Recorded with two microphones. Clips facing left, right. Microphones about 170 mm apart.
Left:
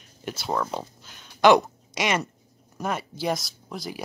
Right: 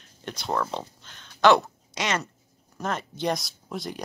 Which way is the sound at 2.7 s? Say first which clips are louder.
Left 1 dB; 10° left (ahead or behind).